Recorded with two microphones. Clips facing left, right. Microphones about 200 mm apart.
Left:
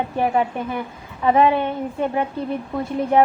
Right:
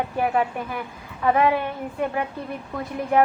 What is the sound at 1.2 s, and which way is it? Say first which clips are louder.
A woman's voice: left 3 dB; 20° left (ahead or behind).